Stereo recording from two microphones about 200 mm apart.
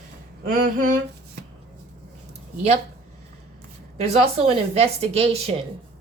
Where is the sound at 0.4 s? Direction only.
45° right (ahead or behind).